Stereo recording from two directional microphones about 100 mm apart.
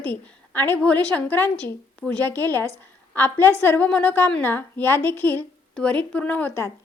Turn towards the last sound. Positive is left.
turn(degrees=25)  # may be behind; listen again after turning